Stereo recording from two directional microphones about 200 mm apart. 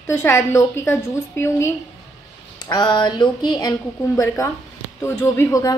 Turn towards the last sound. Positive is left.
turn(degrees=15)  # may be behind; listen again after turning